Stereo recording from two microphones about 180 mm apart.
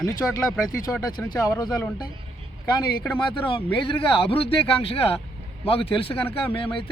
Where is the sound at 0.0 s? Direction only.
20° left (ahead or behind).